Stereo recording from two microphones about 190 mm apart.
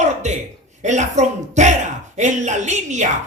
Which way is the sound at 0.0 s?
40° right (ahead or behind).